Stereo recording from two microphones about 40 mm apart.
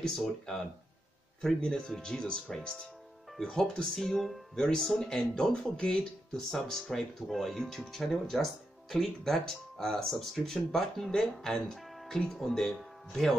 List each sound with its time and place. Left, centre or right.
0.0 s speech: centre
1.6 s speech: left
4.0 s speech: centre
4.6 s speech: centre
6.5 s speech: centre
10.0 s speech: centre